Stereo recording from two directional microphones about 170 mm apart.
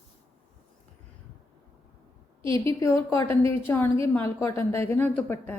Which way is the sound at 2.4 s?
30° right (ahead or behind).